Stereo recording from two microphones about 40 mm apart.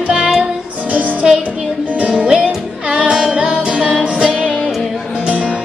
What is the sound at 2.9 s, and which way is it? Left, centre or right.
Music, right.